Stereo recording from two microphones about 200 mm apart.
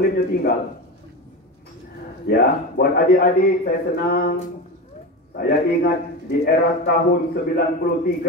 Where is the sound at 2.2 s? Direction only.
50° left (ahead or behind).